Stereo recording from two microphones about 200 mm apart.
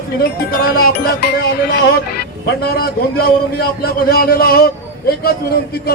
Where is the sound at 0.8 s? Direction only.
50° left (ahead or behind).